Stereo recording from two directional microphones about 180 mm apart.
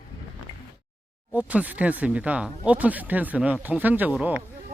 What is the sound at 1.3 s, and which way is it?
Speech, 10° right (ahead or behind).